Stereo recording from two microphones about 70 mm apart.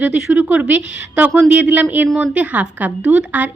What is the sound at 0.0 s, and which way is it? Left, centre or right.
A woman's voice, centre.